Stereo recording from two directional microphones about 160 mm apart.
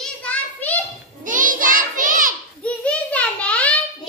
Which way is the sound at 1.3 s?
55° right (ahead or behind).